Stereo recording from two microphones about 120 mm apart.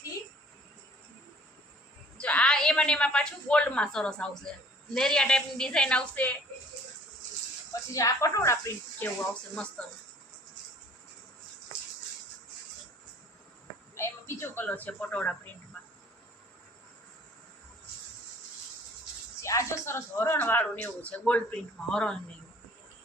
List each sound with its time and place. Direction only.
2.1 s a woman's voice: 10° left (ahead or behind)
7.7 s speech: 30° left (ahead or behind)
13.9 s a woman's voice: 20° left (ahead or behind)
19.4 s a woman's voice: 25° left (ahead or behind); by 22.2 s 5° left (ahead or behind)